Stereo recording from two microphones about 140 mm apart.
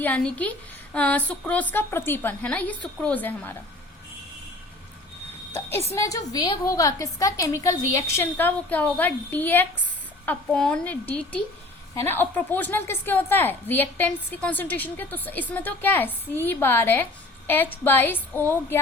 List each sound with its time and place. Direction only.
0.0 s a woman's voice: 10° left (ahead or behind)
5.9 s a woman's voice: 25° left (ahead or behind)